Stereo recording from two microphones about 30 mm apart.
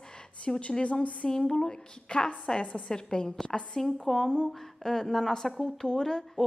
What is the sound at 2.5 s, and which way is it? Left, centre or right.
Speech, centre.